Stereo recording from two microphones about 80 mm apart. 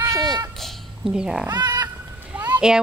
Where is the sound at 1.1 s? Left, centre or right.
Centre.